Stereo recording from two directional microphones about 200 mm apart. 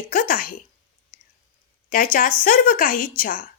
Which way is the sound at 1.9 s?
45° left (ahead or behind).